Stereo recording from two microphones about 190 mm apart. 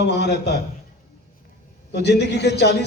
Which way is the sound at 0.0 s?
65° left (ahead or behind).